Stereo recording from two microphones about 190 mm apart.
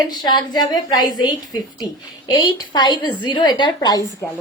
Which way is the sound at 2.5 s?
20° left (ahead or behind).